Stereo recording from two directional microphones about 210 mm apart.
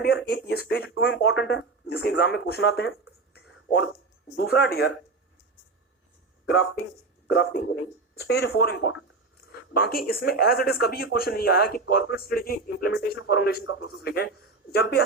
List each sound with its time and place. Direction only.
0.0 s speech: 50° left (ahead or behind)
3.3 s a sound: 55° left (ahead or behind)
4.4 s speech: 50° left (ahead or behind)
7.3 s speech: 55° left (ahead or behind)
9.7 s speech: 45° left (ahead or behind)